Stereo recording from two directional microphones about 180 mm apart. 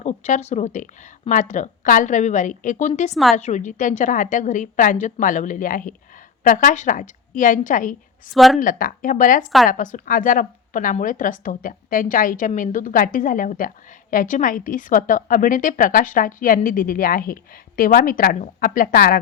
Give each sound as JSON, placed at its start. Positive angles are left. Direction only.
{"t": 0.0, "sound": "a woman's voice", "side_deg": 40}
{"t": 8.3, "sound": "a woman's voice", "side_deg": 0}
{"t": 8.5, "sound": "a woman's voice", "side_deg": 50}